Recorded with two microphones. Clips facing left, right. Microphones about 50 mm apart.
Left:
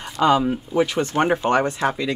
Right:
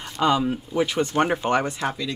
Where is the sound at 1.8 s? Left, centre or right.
Left.